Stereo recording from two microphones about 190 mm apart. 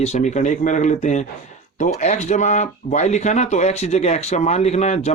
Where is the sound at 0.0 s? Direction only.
35° left (ahead or behind).